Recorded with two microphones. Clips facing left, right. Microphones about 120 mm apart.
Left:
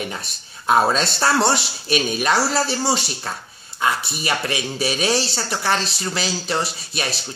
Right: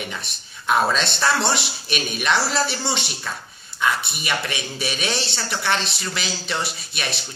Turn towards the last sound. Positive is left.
turn(degrees=35)  # may be behind; listen again after turning